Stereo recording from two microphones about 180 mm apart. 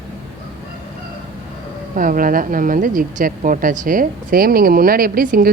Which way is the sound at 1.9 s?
50° right (ahead or behind).